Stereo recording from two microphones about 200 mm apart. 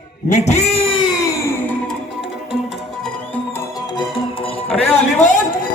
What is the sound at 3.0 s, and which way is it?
Music, 5° left (ahead or behind).